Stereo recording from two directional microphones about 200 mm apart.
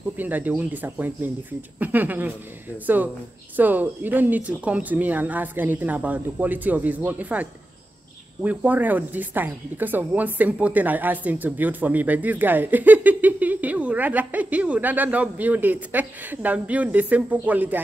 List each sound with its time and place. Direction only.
0.2 s speech: 10° right (ahead or behind)
3.5 s speech: 10° right (ahead or behind)